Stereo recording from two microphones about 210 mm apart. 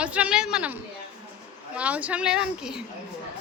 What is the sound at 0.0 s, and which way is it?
Speech, 5° right (ahead or behind).